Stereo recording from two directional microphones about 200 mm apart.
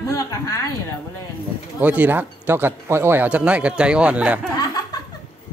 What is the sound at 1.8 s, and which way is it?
Speech, 10° right (ahead or behind).